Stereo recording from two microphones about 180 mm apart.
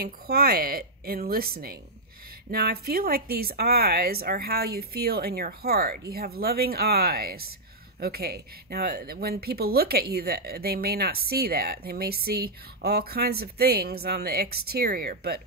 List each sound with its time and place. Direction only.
0.0 s speech: 60° right (ahead or behind)